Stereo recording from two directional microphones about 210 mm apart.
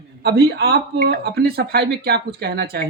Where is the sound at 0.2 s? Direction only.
50° right (ahead or behind).